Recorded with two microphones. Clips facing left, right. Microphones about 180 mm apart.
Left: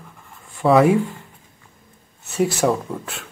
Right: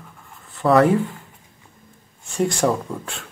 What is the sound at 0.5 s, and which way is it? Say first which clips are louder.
Speech: left 1 dB; 5° left (ahead or behind).